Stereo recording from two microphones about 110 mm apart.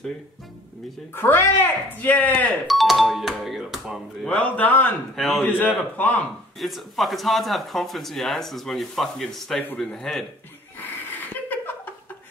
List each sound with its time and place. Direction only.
1.1 s speech: 20° left (ahead or behind)
2.6 s doorbell: centre (ahead or behind)
4.3 s speech: 15° left (ahead or behind)
5.1 s a man's voice: centre (ahead or behind)
5.4 s speech: 15° left (ahead or behind)
6.6 s speech: centre (ahead or behind)
11.4 s laughter: 15° left (ahead or behind)